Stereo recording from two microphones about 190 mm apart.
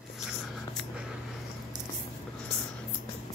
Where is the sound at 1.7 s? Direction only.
20° right (ahead or behind).